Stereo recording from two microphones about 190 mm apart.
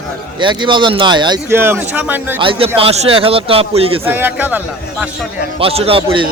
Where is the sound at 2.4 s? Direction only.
30° right (ahead or behind).